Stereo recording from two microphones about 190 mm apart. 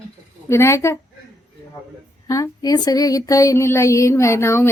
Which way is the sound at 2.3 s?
20° left (ahead or behind).